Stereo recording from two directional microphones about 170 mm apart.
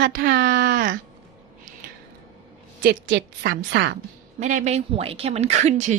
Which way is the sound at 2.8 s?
75° right (ahead or behind).